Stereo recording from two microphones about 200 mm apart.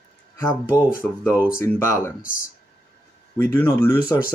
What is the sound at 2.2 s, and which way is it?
Speech, 45° left (ahead or behind).